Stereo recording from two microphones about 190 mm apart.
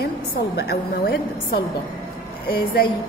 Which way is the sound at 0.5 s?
60° left (ahead or behind).